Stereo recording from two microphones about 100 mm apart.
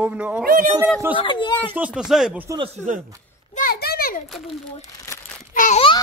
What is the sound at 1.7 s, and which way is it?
Speech, 10° right (ahead or behind).